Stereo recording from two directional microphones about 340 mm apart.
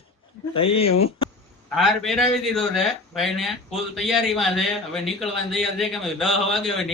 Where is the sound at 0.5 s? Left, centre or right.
Centre.